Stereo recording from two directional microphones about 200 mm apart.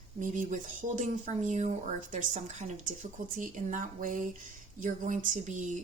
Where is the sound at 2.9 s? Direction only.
40° right (ahead or behind).